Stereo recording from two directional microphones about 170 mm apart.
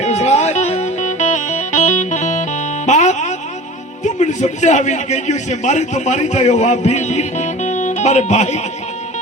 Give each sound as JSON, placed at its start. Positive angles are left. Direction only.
{"t": 0.0, "sound": "music", "side_deg": 40}
{"t": 4.0, "sound": "a man's voice", "side_deg": 45}